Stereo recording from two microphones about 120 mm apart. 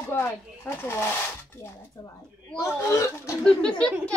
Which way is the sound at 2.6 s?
25° left (ahead or behind).